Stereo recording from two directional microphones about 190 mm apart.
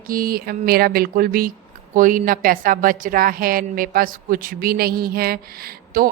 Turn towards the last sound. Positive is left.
turn(degrees=-50)  # may be behind; listen again after turning